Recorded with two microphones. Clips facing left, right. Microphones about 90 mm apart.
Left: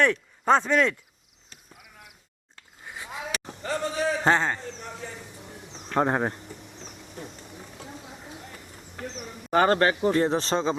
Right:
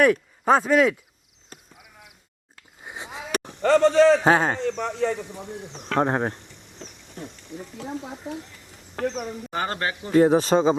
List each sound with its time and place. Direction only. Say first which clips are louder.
0.0 s speech: right 4 dB; 5° right (ahead or behind)
1.5 s a sound: right 8 dB; 45° right (ahead or behind)
2.8 s a sound: right 2 dB; 20° right (ahead or behind)
3.6 s speech: right 12 dB; 75° right (ahead or behind)
4.2 s speech: right 3 dB; 10° right (ahead or behind)
4.5 s speech: right 11 dB; 80° right
6.0 s speech: right 1 dB; centre (ahead or behind)
9.0 s speech: right 11 dB; 70° right (ahead or behind)
9.5 s speech: left 9 dB; 55° left (ahead or behind)
10.2 s speech: right 7 dB; 10° right (ahead or behind)